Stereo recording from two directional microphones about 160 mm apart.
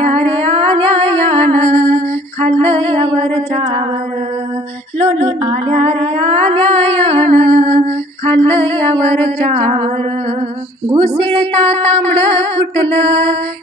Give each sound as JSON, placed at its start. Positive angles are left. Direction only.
{"t": 0.3, "sound": "music", "side_deg": -40}
{"t": 4.9, "sound": "female singing", "side_deg": -40}
{"t": 6.1, "sound": "mantra", "side_deg": -40}
{"t": 10.9, "sound": "music", "side_deg": -35}